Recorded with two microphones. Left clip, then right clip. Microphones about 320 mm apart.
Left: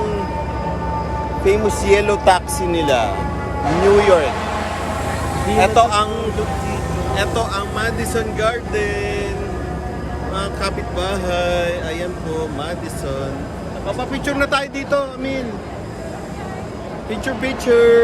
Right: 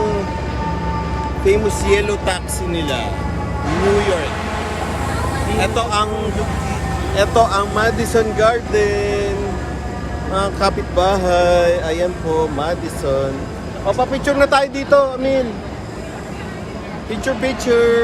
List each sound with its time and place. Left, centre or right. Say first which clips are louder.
1.5 s speech: even; centre
5.5 s speech: left 5 dB; centre
7.2 s speech: right 8 dB; centre
10.3 s speech: right 6 dB; centre
17.1 s speech: right 3 dB; centre